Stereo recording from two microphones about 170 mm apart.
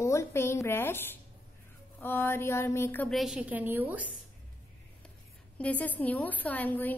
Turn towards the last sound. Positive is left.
turn(degrees=10)  # may be behind; listen again after turning